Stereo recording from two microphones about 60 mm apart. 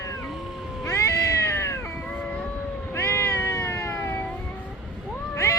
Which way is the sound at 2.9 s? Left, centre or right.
Left.